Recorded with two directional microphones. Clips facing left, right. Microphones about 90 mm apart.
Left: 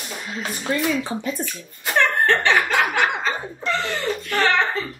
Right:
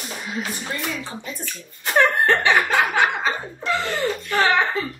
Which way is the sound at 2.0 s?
10° right (ahead or behind).